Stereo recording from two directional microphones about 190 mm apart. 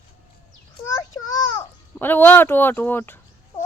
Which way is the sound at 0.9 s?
15° left (ahead or behind).